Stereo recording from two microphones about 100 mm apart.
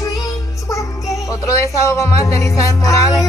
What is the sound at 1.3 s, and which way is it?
Speech, 30° left (ahead or behind).